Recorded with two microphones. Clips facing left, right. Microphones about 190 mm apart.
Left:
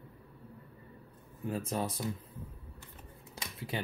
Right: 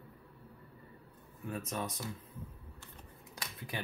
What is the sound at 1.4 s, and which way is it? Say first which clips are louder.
Speech: left 4 dB; 30° left (ahead or behind).